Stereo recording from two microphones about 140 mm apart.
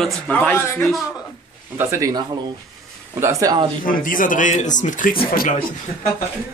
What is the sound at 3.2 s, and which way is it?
Speech, 20° right (ahead or behind).